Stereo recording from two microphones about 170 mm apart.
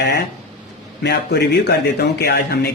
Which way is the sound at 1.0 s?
75° left (ahead or behind).